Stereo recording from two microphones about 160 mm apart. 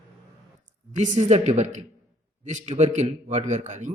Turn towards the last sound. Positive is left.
turn(degrees=-50)  # may be behind; listen again after turning